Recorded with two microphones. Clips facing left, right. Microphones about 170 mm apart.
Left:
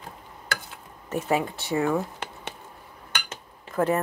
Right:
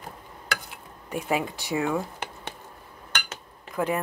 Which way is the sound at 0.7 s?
15° right (ahead or behind).